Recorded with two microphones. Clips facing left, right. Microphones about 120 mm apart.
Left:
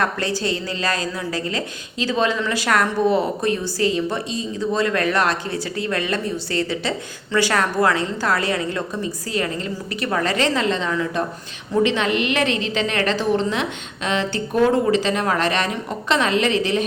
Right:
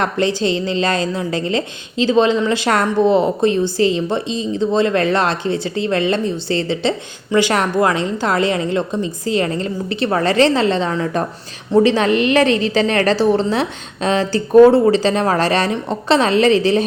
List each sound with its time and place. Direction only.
0.0 s a woman's voice: 20° right (ahead or behind)